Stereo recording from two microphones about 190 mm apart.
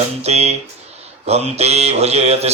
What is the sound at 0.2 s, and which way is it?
Mantra, 35° right (ahead or behind).